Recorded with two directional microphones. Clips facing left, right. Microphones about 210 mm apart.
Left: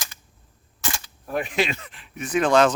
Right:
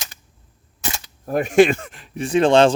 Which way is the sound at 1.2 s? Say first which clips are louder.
Right 11 dB; 45° right (ahead or behind).